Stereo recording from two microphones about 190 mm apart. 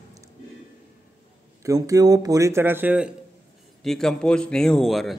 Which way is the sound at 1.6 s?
20° right (ahead or behind).